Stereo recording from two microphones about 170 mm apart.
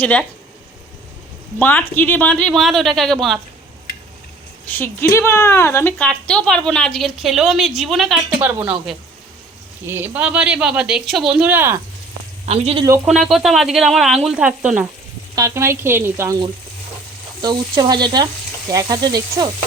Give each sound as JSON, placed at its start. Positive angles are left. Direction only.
{"t": 0.0, "sound": "speech", "side_deg": 10}
{"t": 1.5, "sound": "a woman's voice", "side_deg": 10}
{"t": 4.6, "sound": "a woman's voice", "side_deg": 10}
{"t": 8.4, "sound": "speech", "side_deg": -10}
{"t": 9.8, "sound": "a woman's voice", "side_deg": -15}
{"t": 12.5, "sound": "speech", "side_deg": -35}
{"t": 13.1, "sound": "a woman's voice", "side_deg": 0}
{"t": 17.4, "sound": "frying", "side_deg": -25}